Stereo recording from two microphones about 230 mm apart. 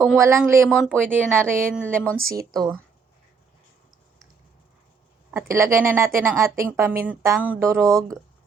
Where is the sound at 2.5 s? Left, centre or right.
Centre.